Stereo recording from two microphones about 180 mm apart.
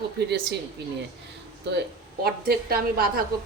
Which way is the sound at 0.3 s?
65° right (ahead or behind).